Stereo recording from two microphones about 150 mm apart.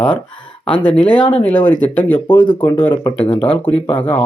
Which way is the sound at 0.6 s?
35° left (ahead or behind).